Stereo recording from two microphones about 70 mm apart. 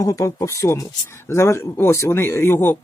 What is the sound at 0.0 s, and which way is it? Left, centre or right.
Speech, left.